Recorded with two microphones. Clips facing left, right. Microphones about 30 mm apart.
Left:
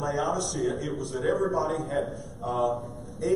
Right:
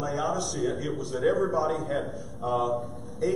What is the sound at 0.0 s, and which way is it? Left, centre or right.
A man's voice, centre.